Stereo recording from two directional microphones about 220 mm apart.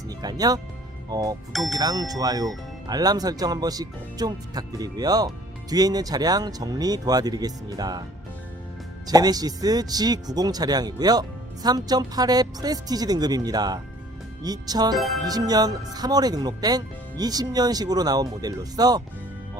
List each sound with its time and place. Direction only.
0.1 s speech: 15° right (ahead or behind)
9.0 s speech: 15° right (ahead or behind)
14.9 s speech: centre (ahead or behind)
15.2 s speech: 15° right (ahead or behind)